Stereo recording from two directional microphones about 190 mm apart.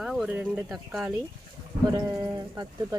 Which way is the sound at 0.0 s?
Centre (ahead or behind).